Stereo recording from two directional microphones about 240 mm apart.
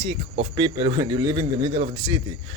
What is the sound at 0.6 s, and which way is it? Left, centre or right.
A man's voice, centre.